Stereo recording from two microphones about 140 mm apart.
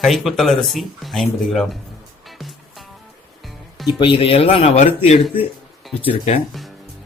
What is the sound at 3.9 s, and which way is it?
Speech, 35° left (ahead or behind).